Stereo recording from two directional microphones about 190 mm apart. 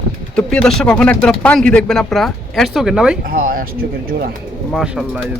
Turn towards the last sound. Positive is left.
turn(degrees=-5)  # may be behind; listen again after turning